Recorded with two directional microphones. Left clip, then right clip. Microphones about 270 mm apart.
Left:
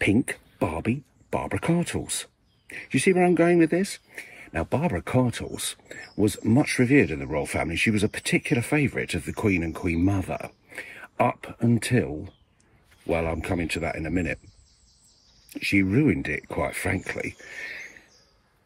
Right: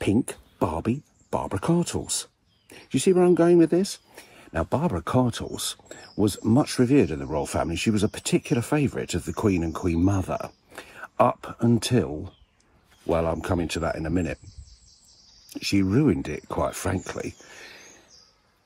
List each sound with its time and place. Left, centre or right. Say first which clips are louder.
0.0 s speech: left 2 dB; centre
15.5 s speech: left 1 dB; centre